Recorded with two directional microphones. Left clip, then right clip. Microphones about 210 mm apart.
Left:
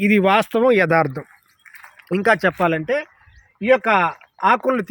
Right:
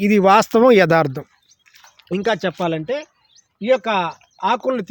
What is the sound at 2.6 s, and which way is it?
Speech, 5° right (ahead or behind).